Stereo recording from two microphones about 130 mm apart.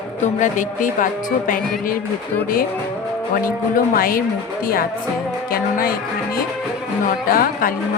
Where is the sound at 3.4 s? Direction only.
90° left.